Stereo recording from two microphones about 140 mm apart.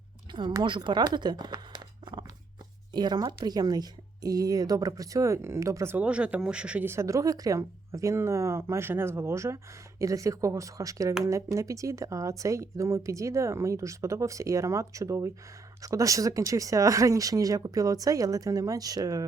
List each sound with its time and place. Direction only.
0.3 s speech: 30° right (ahead or behind)